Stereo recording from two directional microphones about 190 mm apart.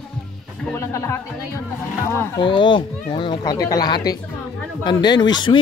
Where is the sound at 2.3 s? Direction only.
25° left (ahead or behind).